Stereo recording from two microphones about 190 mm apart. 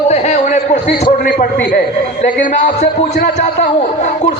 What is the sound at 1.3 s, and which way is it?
Speech, 45° left (ahead or behind).